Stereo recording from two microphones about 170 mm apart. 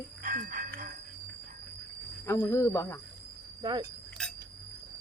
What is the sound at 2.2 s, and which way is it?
Speech, 15° left (ahead or behind).